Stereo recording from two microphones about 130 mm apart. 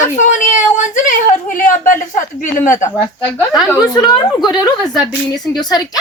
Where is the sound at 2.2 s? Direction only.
80° left.